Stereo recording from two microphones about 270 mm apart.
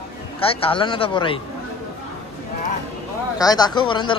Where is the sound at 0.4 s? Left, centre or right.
Left.